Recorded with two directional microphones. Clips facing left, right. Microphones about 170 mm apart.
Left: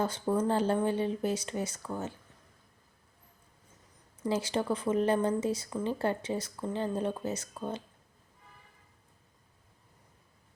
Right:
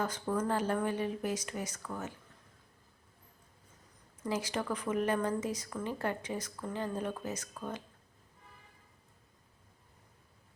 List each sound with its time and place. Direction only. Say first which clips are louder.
0.0 s speech: left 4 dB; 30° left (ahead or behind)
4.2 s speech: left 4 dB; 30° left (ahead or behind)